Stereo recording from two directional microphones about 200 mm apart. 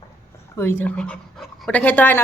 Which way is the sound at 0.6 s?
10° left (ahead or behind).